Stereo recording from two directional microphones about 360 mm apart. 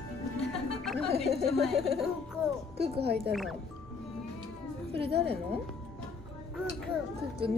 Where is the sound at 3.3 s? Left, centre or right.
Centre.